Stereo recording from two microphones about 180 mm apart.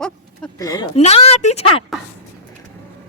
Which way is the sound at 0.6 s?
20° left (ahead or behind).